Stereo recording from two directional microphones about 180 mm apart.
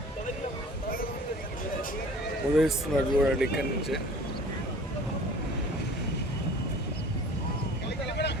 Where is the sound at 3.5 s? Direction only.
65° left (ahead or behind).